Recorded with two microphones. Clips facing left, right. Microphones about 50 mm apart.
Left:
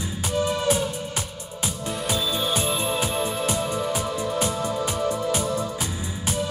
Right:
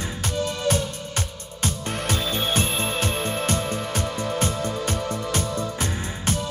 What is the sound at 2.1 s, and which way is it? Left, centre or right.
Music, right.